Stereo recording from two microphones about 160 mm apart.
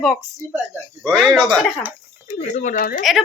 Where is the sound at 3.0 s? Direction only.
Centre (ahead or behind).